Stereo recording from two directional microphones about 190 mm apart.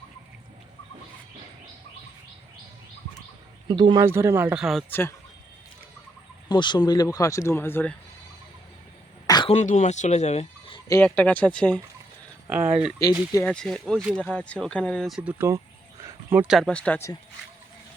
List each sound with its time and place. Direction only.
3.7 s a man's voice: 20° right (ahead or behind); by 4.9 s centre (ahead or behind)
4.9 s speech: 10° left (ahead or behind)
6.5 s speech: 25° left (ahead or behind)
9.2 s throat clearing: 20° left (ahead or behind)
9.5 s speech: 40° left (ahead or behind)
10.8 s speech: 10° left (ahead or behind)
13.0 s speech: 15° left (ahead or behind)
13.3 s speech: 5° left (ahead or behind)